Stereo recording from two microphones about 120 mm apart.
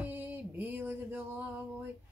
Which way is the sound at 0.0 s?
15° right (ahead or behind).